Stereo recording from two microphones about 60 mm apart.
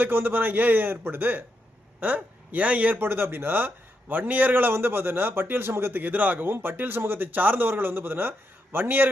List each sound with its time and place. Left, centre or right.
0.0 s a man's voice: right